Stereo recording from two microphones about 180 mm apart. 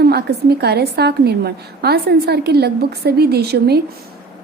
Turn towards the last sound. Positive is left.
turn(degrees=-60)  # may be behind; listen again after turning